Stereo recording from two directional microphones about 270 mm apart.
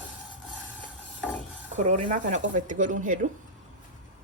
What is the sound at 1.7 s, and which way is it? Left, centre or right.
Speech, right.